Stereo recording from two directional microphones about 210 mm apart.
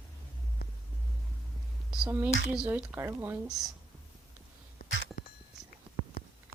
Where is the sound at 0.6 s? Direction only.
50° left (ahead or behind).